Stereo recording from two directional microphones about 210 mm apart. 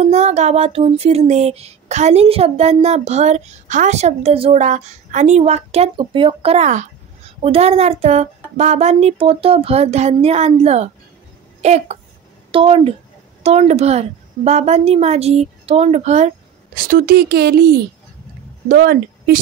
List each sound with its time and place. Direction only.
0.0 s music: 30° right (ahead or behind)
11.6 s a woman's voice: 30° right (ahead or behind)
13.4 s music: 30° right (ahead or behind); by 17.7 s 50° right (ahead or behind)
18.7 s speech: 45° right (ahead or behind)